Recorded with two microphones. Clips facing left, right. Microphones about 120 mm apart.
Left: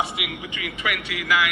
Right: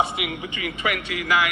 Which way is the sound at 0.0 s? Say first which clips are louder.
Right 3 dB; 30° right (ahead or behind).